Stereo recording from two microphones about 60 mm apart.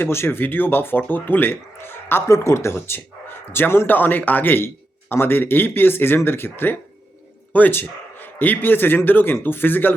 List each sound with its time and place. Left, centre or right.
0.0 s speech: left
2.3 s speech: left
2.7 s a man's voice: left